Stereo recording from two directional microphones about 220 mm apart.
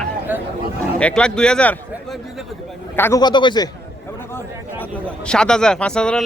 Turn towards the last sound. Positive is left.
turn(degrees=5)  # may be behind; listen again after turning